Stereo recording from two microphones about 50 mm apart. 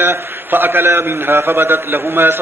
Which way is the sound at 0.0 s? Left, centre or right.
Right.